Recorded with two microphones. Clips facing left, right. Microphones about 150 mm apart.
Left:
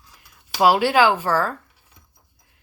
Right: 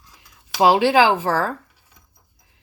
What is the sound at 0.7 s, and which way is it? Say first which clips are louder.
Speech: right 2 dB; 30° right (ahead or behind).